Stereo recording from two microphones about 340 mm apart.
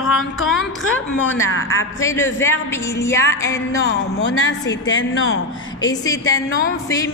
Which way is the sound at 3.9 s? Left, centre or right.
Left.